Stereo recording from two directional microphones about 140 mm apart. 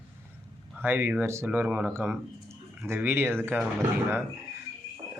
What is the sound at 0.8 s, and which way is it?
Speech, 15° right (ahead or behind).